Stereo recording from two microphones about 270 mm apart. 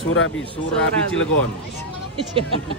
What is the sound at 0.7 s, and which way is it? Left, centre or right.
Speech, centre.